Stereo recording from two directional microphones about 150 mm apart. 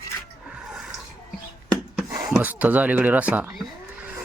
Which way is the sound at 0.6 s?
5° right (ahead or behind).